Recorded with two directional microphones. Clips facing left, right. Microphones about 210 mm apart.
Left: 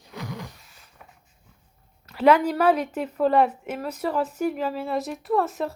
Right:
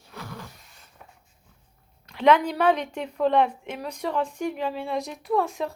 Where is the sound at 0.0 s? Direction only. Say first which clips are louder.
Left 4 dB; 15° left (ahead or behind).